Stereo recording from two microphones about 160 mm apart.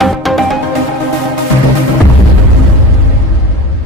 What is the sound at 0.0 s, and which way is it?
Music, centre (ahead or behind).